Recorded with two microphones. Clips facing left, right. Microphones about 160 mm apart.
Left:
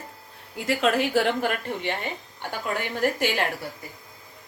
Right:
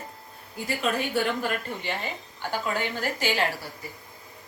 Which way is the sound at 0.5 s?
90° left.